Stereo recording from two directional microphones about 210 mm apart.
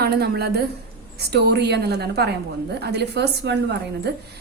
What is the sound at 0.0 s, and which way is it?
A woman's voice, 50° right (ahead or behind).